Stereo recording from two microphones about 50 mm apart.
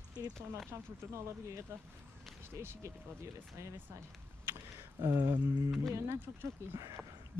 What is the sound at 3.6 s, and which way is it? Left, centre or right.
Speech, right.